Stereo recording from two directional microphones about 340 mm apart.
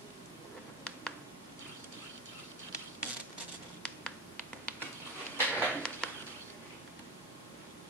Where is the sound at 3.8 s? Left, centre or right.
Centre.